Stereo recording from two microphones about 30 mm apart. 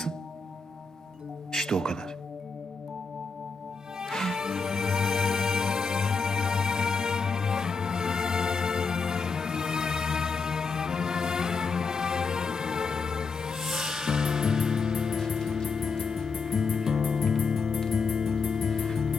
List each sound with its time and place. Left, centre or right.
1.5 s speech: centre
4.1 s music: centre
4.4 s music: centre
18.2 s music: centre